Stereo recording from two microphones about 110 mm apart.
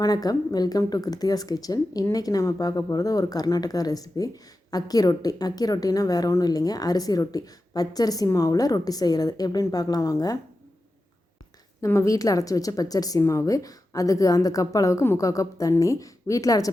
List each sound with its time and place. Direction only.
0.0 s a woman's voice: 35° left (ahead or behind)
11.9 s a woman's voice: 30° left (ahead or behind)